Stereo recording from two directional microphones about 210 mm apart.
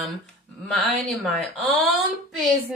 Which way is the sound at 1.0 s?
Centre (ahead or behind).